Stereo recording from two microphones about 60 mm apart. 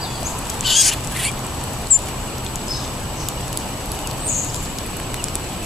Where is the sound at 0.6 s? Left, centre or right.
Centre.